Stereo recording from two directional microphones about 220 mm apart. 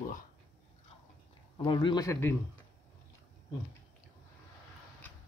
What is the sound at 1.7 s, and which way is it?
Speech, 20° left (ahead or behind).